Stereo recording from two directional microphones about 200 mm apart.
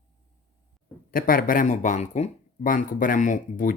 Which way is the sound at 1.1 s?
45° left (ahead or behind).